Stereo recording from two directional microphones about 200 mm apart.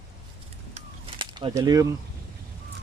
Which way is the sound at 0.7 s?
30° right (ahead or behind).